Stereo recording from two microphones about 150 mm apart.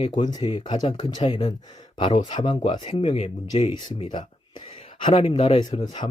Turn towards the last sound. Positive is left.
turn(degrees=30)  # may be behind; listen again after turning